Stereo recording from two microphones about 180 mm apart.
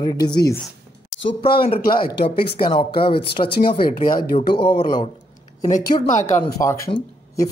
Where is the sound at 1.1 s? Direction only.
90° left.